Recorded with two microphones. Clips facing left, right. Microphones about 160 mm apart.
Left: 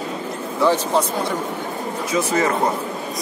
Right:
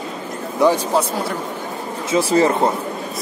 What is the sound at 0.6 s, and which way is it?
Speech, 10° right (ahead or behind).